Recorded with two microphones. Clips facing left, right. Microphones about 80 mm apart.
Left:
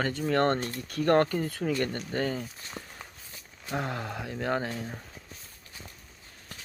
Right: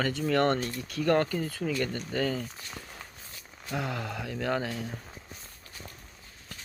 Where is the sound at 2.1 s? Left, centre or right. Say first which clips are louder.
Right 1 dB; left.